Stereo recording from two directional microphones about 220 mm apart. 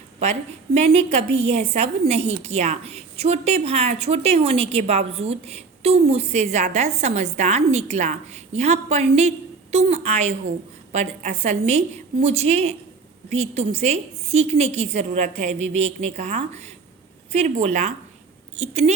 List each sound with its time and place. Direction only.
0.2 s a woman's voice: 30° right (ahead or behind)